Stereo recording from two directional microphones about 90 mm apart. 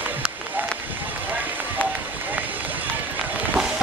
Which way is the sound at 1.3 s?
20° right (ahead or behind).